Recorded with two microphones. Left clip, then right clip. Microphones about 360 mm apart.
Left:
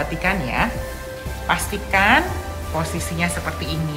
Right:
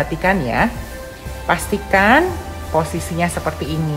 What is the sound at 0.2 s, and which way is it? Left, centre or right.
A woman's voice, right.